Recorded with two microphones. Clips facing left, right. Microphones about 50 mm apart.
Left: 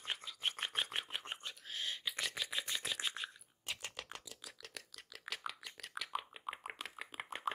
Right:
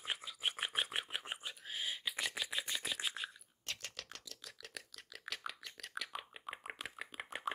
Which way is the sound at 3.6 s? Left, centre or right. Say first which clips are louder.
Left 1 dB; centre.